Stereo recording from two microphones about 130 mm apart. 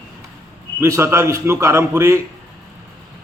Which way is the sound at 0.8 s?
20° right (ahead or behind).